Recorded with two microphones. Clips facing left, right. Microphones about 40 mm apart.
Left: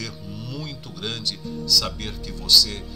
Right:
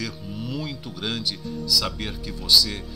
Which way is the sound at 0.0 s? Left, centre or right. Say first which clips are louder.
Right 3 dB; centre.